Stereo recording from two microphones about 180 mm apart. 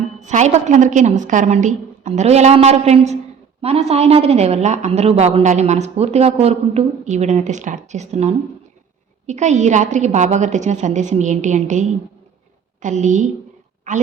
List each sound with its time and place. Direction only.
0.2 s a woman's voice: 40° right (ahead or behind)